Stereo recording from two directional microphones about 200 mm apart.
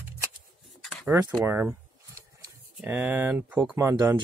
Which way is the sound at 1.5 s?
10° right (ahead or behind).